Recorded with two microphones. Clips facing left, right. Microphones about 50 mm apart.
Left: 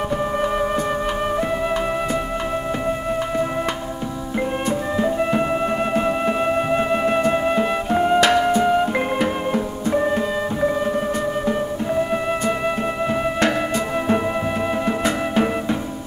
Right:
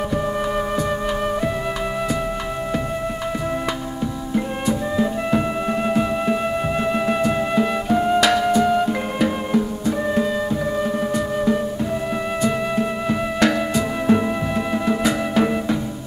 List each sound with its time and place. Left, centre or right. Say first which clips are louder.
4.9 s music: left 3 dB; left
14.9 s music: right 1 dB; left